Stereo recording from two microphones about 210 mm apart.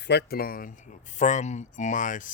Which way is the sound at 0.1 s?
50° left (ahead or behind).